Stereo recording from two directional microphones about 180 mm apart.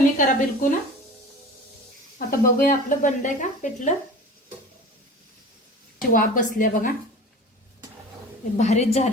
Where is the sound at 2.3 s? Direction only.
50° left (ahead or behind).